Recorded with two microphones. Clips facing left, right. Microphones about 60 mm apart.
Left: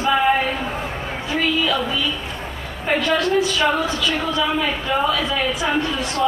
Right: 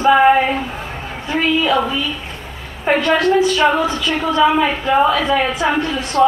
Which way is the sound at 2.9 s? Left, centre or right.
Right.